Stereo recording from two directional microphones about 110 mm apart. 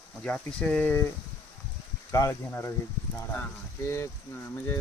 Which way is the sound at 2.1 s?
30° left (ahead or behind).